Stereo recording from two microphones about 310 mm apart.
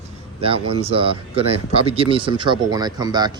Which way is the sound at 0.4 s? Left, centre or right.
Centre.